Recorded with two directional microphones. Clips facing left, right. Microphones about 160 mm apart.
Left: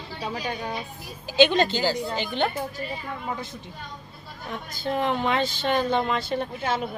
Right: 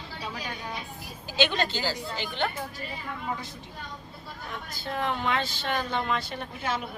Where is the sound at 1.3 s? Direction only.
20° left (ahead or behind).